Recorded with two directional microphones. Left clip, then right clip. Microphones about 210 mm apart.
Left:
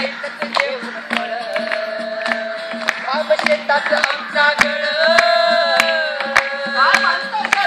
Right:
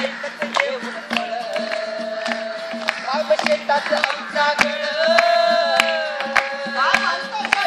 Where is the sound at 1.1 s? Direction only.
10° right (ahead or behind).